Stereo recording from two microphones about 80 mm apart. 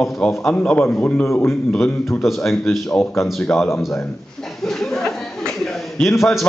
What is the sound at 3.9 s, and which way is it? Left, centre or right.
Chuckle, centre.